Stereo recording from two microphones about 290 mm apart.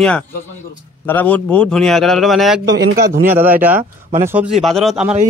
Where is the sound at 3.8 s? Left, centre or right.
Right.